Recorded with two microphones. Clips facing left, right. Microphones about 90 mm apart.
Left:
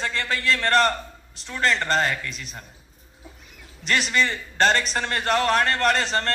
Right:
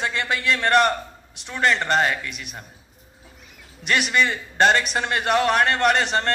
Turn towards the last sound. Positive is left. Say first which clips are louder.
# right 2 dB
turn(degrees=-15)  # may be behind; listen again after turning